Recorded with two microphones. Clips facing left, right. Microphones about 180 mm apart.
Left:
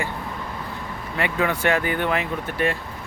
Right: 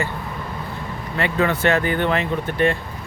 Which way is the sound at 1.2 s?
10° left (ahead or behind).